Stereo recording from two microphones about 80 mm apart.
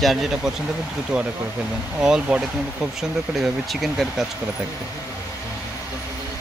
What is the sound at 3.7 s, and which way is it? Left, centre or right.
Speech, centre.